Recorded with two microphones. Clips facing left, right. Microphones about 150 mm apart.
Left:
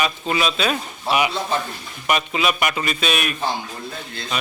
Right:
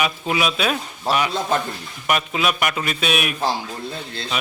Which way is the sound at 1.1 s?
40° right (ahead or behind).